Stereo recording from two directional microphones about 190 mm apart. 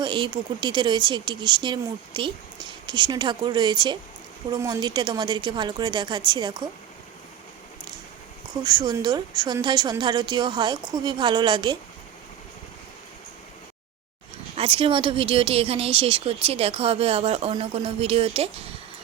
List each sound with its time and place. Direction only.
0.0 s speech: 25° right (ahead or behind)
8.6 s speech: 20° right (ahead or behind)
14.5 s speech: 30° right (ahead or behind)